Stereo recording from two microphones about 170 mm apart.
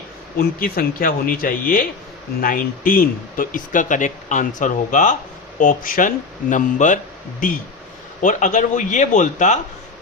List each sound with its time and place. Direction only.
0.3 s speech: 60° left (ahead or behind)